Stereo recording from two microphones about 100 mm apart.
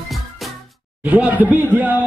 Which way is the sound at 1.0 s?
15° right (ahead or behind).